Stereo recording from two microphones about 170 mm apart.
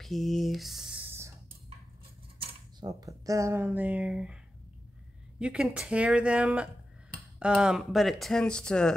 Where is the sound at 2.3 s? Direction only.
30° right (ahead or behind).